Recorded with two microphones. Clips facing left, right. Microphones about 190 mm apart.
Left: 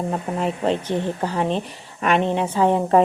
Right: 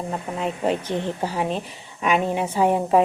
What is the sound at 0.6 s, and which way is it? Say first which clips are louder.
A woman's voice: even; 10° right (ahead or behind).